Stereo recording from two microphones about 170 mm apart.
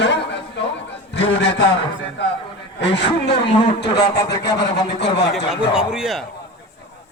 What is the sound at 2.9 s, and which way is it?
Speech, 85° left.